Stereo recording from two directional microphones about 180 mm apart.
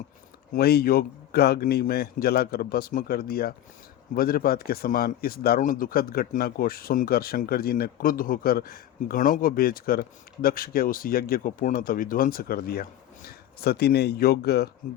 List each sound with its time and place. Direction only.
0.5 s speech: 60° left (ahead or behind)